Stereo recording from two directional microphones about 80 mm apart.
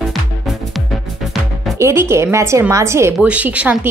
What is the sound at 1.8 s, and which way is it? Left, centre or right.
Speech, right.